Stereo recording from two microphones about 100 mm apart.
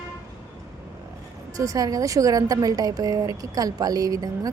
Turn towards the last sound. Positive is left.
turn(degrees=-35)  # may be behind; listen again after turning